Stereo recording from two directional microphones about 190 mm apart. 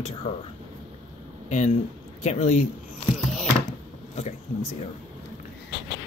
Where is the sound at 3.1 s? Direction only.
Centre (ahead or behind).